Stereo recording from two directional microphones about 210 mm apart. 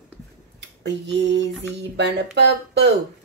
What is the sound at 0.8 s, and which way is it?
Speech, 55° right (ahead or behind).